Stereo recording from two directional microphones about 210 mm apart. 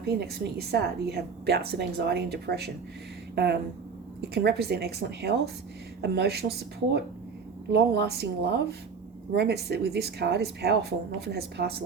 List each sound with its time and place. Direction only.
0.0 s a woman's voice: 50° right (ahead or behind)